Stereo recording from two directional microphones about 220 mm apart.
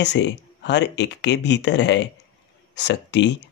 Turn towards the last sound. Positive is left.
turn(degrees=55)  # may be behind; listen again after turning